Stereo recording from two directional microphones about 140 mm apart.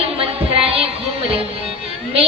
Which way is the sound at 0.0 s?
40° right (ahead or behind).